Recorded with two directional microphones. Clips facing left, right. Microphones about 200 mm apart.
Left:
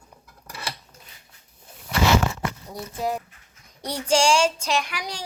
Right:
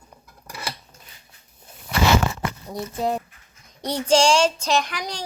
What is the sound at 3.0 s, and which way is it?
Speech, 30° right (ahead or behind).